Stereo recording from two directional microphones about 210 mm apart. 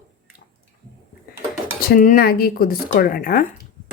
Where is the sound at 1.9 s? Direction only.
40° left (ahead or behind).